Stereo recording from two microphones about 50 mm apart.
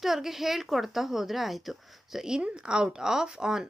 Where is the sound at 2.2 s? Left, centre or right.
Centre.